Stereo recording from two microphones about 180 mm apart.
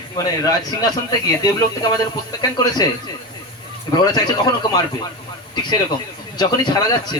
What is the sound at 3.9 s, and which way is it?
Speech, 20° left (ahead or behind).